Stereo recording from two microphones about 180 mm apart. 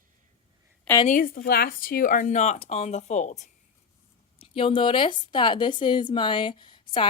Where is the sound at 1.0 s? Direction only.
50° left (ahead or behind).